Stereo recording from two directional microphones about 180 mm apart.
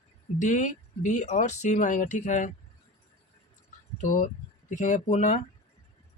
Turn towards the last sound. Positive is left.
turn(degrees=45)  # may be behind; listen again after turning